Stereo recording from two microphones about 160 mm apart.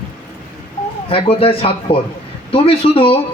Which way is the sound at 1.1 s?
35° left (ahead or behind).